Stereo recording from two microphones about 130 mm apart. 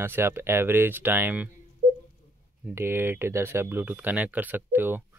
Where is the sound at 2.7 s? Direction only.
20° right (ahead or behind).